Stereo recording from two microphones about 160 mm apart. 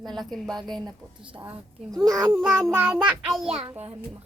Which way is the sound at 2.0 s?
20° right (ahead or behind).